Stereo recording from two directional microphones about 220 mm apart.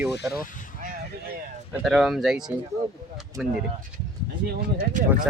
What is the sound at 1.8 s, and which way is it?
Speech, centre (ahead or behind).